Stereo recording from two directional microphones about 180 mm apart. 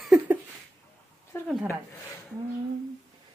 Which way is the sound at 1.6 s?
15° left (ahead or behind).